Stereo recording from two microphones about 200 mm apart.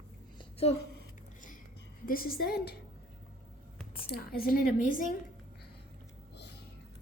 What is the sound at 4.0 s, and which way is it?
A woman's voice, 50° left (ahead or behind).